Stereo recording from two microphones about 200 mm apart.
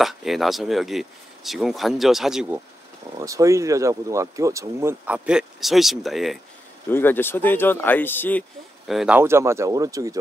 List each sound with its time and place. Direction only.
0.0 s speech: centre (ahead or behind)
3.2 s speech: 15° right (ahead or behind); by 6.4 s centre (ahead or behind)
6.9 s speech: 10° left (ahead or behind); by 10.1 s 15° right (ahead or behind)